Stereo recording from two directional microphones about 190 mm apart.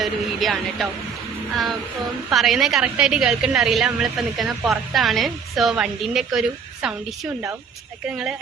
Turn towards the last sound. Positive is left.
turn(degrees=-5)  # may be behind; listen again after turning